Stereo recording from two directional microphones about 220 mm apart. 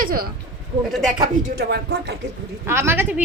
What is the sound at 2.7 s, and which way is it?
Speech, 10° right (ahead or behind).